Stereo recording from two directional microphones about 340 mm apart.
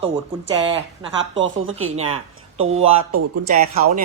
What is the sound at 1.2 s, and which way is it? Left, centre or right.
Speech, right.